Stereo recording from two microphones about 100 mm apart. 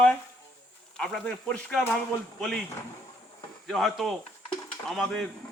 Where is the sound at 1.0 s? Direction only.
5° left (ahead or behind).